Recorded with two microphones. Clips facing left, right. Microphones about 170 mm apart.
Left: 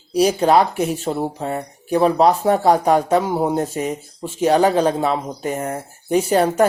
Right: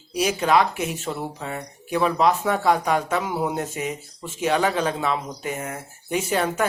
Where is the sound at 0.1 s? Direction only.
35° left (ahead or behind).